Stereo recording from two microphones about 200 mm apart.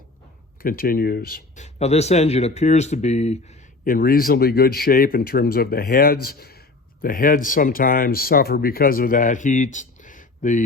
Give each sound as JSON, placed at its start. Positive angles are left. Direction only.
{"t": 0.6, "sound": "speech", "side_deg": 45}
{"t": 1.6, "sound": "speech", "side_deg": 30}
{"t": 3.8, "sound": "speech", "side_deg": 45}